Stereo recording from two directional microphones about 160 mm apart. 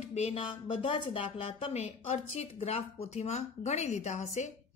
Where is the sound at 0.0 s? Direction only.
45° left (ahead or behind).